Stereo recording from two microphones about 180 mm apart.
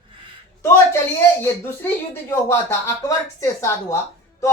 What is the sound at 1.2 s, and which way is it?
Speech, 15° left (ahead or behind).